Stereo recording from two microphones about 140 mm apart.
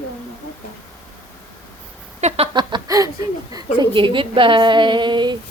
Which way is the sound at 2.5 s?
30° right (ahead or behind).